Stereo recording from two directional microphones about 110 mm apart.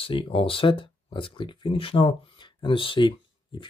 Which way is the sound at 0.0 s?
55° left (ahead or behind).